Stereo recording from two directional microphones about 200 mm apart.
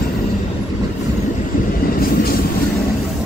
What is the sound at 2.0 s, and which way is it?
Train, 50° left (ahead or behind).